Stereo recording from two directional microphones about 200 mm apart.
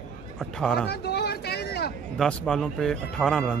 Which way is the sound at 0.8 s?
55° left (ahead or behind).